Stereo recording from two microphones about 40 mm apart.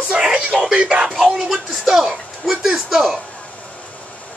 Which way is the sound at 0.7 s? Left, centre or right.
Right.